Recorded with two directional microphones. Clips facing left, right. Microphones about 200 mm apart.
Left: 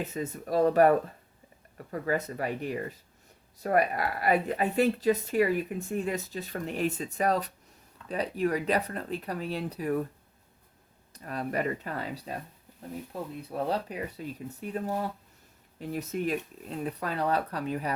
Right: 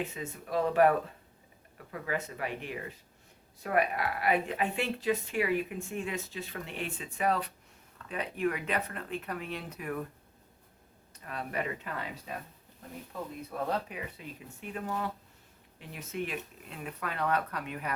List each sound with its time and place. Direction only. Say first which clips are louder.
0.1 s speech: left 5 dB; 40° left (ahead or behind)
11.1 s speech: left 5 dB; 40° left (ahead or behind)
13.5 s speech: left 3 dB; 30° left (ahead or behind)